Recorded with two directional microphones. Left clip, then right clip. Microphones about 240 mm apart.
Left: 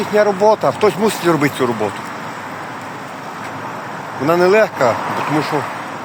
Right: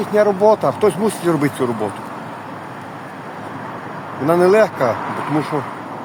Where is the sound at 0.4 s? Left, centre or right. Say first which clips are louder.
Left 1 dB; centre.